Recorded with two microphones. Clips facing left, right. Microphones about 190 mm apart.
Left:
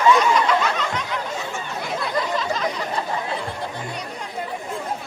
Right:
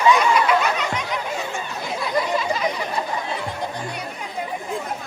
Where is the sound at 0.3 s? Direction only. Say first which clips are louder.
Right 1 dB; 10° right (ahead or behind).